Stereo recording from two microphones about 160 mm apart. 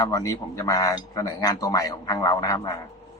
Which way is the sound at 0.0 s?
20° left (ahead or behind).